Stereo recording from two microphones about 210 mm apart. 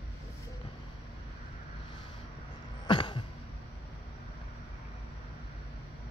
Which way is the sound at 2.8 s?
25° left (ahead or behind).